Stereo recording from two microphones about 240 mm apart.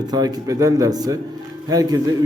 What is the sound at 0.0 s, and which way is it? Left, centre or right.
A man's voice, centre.